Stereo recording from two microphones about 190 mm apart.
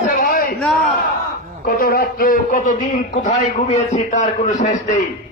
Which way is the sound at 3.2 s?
35° left (ahead or behind).